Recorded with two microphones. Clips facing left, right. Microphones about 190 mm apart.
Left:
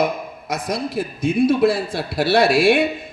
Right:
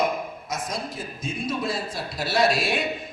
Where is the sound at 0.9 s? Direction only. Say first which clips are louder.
Left 13 dB; 65° left (ahead or behind).